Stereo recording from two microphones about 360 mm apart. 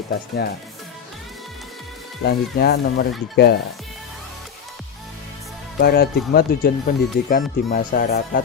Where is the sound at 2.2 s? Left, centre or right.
Left.